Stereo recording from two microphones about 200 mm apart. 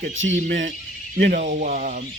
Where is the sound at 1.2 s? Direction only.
40° right (ahead or behind).